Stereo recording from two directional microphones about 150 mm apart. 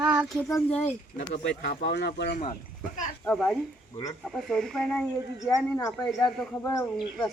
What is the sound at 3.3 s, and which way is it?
Speech, centre (ahead or behind).